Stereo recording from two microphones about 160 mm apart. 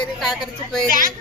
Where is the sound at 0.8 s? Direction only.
55° right (ahead or behind).